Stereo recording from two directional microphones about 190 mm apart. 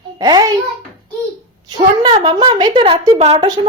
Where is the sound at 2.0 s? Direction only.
25° right (ahead or behind).